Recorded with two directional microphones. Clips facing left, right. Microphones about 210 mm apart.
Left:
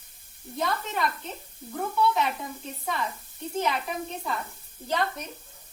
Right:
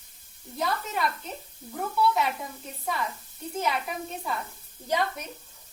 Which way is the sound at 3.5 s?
5° right (ahead or behind).